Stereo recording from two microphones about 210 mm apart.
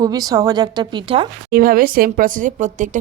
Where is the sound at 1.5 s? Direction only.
45° right (ahead or behind).